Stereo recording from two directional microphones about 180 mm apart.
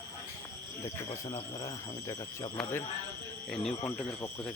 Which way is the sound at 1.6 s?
20° left (ahead or behind).